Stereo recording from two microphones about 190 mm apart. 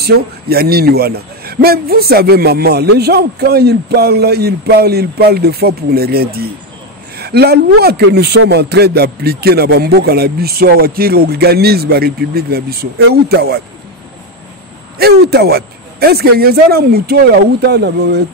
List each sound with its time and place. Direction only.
0.0 s a man's voice: 55° right (ahead or behind)
15.0 s a man's voice: 55° right (ahead or behind)